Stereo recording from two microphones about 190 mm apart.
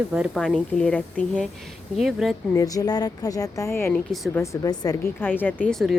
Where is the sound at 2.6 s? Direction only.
20° left (ahead or behind).